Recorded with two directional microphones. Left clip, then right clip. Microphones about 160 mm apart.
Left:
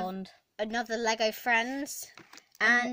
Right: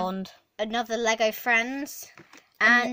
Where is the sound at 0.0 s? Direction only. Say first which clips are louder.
Right 6 dB; 15° right (ahead or behind).